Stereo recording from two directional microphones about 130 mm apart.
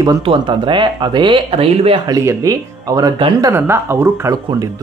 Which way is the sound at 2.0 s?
25° right (ahead or behind).